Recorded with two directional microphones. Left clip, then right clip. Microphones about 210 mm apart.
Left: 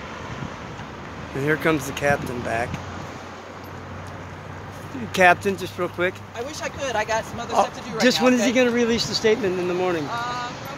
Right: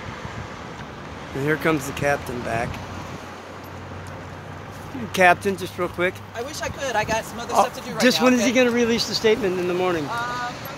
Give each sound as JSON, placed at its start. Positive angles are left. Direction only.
{"t": 1.4, "sound": "speech", "side_deg": -5}
{"t": 5.1, "sound": "speech", "side_deg": -5}
{"t": 6.6, "sound": "speech", "side_deg": -30}
{"t": 8.0, "sound": "speech", "side_deg": -10}
{"t": 10.0, "sound": "speech", "side_deg": -25}